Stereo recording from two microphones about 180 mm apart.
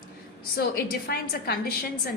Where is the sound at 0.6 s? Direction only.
60° left (ahead or behind).